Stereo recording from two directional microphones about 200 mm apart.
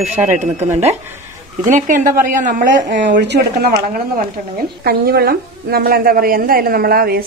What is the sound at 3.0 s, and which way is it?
Speech, 60° right (ahead or behind).